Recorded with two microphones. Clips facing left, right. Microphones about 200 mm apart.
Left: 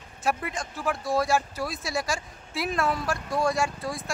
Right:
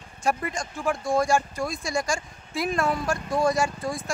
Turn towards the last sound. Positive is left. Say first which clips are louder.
# right 2 dB
turn(degrees=0)  # may be behind; listen again after turning